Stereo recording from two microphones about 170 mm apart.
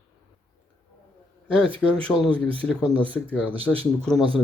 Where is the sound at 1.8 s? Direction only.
5° left (ahead or behind).